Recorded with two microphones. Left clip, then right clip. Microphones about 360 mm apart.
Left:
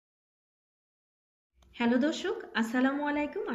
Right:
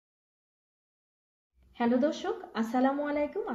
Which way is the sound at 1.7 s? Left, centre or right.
Centre.